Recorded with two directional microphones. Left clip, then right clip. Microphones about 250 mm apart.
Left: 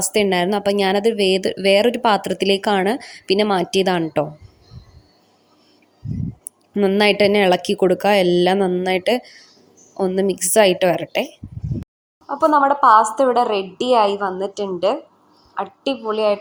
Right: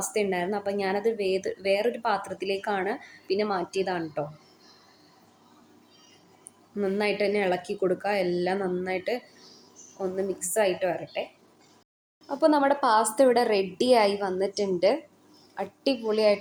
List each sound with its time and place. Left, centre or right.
0.0 s speech: left
6.7 s speech: left
12.3 s a woman's voice: centre